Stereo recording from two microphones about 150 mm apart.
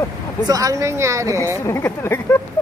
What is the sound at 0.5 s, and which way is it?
Speech, 25° right (ahead or behind).